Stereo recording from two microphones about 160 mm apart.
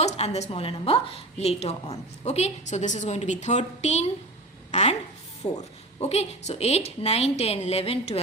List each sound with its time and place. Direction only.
0.0 s a woman's voice: 45° left (ahead or behind)